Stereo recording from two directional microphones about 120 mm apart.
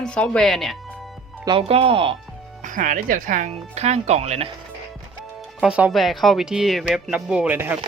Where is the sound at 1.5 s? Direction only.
50° right (ahead or behind).